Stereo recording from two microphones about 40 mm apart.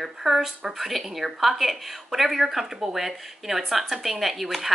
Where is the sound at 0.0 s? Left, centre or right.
Centre.